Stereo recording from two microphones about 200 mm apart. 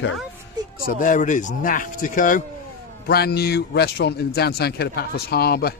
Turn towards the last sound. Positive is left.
turn(degrees=50)  # may be behind; listen again after turning